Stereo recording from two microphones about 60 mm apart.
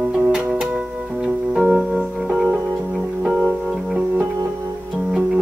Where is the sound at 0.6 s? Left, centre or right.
Centre.